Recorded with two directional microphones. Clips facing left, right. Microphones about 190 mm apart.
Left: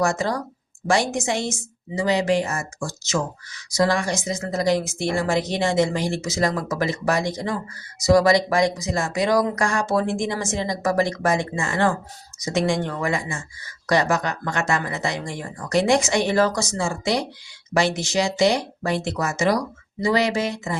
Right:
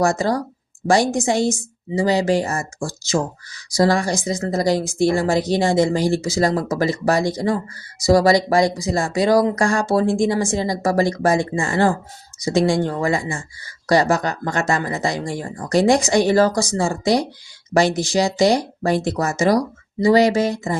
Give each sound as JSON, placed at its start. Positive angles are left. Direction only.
{"t": 0.0, "sound": "a woman's voice", "side_deg": -35}